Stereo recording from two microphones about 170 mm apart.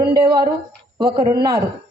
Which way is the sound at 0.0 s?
25° right (ahead or behind).